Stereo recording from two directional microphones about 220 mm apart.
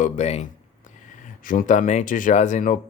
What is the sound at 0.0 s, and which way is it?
Speech, 30° left (ahead or behind).